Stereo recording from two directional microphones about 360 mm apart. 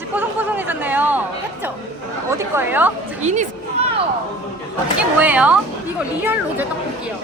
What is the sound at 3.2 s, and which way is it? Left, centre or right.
Speech, centre.